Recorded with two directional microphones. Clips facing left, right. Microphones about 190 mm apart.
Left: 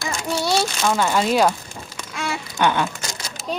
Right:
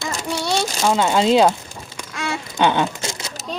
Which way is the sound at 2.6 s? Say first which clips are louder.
Right 2 dB; 20° right (ahead or behind).